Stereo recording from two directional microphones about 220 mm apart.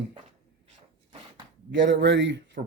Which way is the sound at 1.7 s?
55° right (ahead or behind).